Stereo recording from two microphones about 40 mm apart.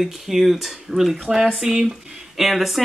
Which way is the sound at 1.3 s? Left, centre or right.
Centre.